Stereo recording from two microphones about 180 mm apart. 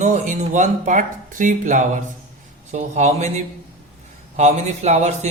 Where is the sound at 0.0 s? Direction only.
40° right (ahead or behind).